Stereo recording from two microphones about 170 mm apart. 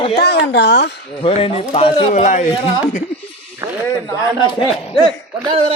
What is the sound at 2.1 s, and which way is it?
Speech, 45° left (ahead or behind).